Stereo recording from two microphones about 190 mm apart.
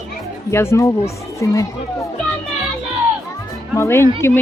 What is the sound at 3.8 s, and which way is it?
Speech, 15° left (ahead or behind).